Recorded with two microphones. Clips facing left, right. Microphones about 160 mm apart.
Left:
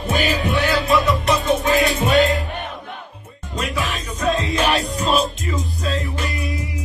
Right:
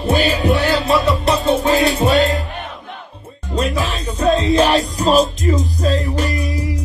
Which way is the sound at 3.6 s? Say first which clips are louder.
Right 5 dB; 35° right (ahead or behind).